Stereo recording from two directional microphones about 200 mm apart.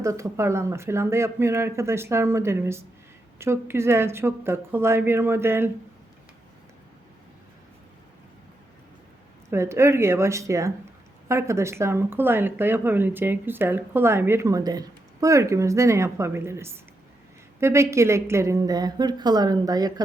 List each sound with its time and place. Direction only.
0.0 s speech: 15° right (ahead or behind)
9.5 s speech: 15° right (ahead or behind)